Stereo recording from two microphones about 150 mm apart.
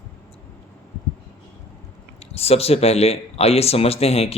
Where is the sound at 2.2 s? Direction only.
40° left (ahead or behind).